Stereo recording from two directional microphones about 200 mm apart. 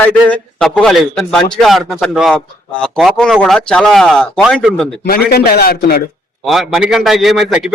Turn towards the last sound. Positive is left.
turn(degrees=0)  # may be behind; listen again after turning